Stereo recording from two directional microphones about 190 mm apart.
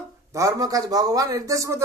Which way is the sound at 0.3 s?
15° right (ahead or behind).